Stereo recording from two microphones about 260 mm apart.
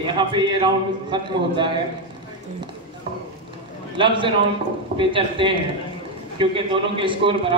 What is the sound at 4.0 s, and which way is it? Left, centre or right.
A man's voice, centre.